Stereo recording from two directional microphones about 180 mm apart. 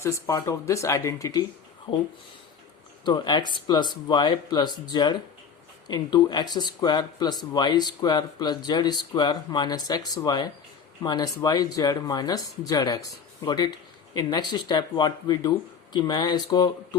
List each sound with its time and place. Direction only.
0.0 s speech: 15° left (ahead or behind)